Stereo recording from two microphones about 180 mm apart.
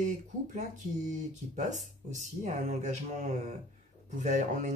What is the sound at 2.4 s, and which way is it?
Speech, 40° right (ahead or behind).